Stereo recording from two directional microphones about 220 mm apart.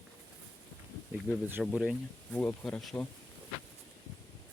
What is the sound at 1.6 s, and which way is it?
Speech, 5° right (ahead or behind).